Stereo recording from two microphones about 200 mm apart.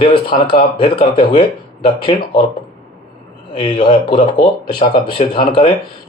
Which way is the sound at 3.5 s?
25° left (ahead or behind).